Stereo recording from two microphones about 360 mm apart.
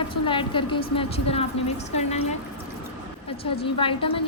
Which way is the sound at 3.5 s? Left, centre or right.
Centre.